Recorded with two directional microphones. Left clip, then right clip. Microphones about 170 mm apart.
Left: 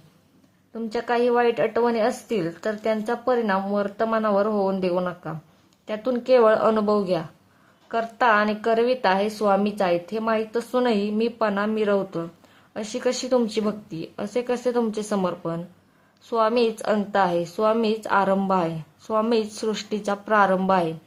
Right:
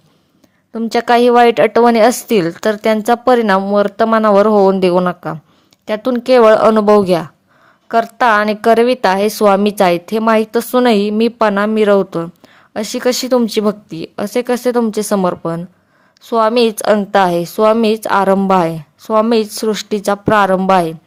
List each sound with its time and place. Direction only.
0.7 s a woman's voice: 45° right (ahead or behind)